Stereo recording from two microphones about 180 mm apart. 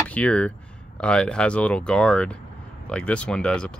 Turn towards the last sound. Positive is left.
turn(degrees=5)  # may be behind; listen again after turning